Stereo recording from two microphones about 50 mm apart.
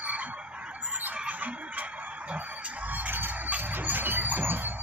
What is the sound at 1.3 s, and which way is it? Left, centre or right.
Music, right.